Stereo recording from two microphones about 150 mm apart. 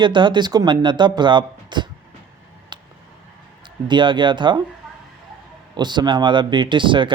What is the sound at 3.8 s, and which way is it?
Speech, 30° right (ahead or behind).